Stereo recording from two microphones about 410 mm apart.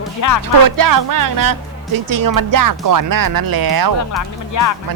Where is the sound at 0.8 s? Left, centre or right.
Right.